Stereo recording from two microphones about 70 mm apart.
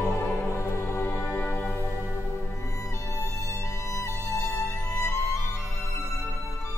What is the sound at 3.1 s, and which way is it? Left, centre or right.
Music, left.